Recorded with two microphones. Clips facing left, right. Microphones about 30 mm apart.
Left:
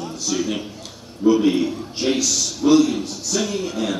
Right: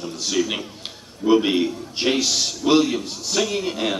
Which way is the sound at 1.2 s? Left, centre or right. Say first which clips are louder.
Left 1 dB; right.